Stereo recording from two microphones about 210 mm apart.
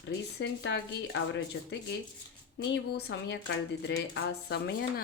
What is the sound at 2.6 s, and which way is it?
Speech, 60° left (ahead or behind).